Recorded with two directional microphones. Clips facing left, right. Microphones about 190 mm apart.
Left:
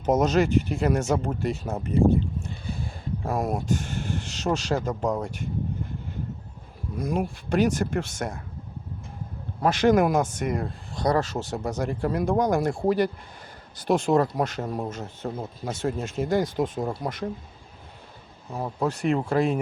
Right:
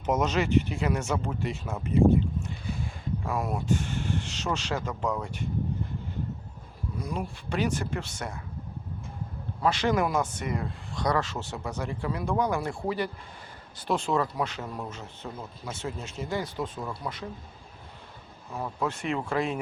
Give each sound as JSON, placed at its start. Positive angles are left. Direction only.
{"t": 0.0, "sound": "speech", "side_deg": 40}
{"t": 7.0, "sound": "speech", "side_deg": 45}
{"t": 9.6, "sound": "speech", "side_deg": 45}
{"t": 18.6, "sound": "speech", "side_deg": 40}